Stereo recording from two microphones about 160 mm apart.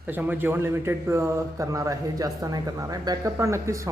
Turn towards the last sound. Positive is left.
turn(degrees=-20)  # may be behind; listen again after turning